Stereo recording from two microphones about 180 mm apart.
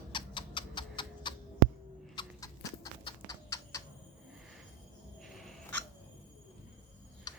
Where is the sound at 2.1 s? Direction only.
20° left (ahead or behind).